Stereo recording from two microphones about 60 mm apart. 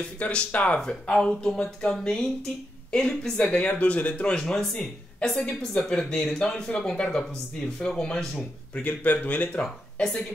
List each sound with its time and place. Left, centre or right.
0.2 s speech: centre
0.7 s speech: centre
3.5 s speech: left; by 8.3 s centre
8.7 s speech: left
9.9 s speech: centre